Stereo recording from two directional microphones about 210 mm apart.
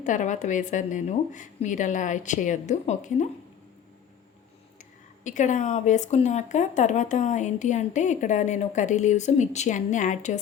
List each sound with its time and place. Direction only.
0.0 s speech: 35° left (ahead or behind)
5.2 s speech: 35° left (ahead or behind)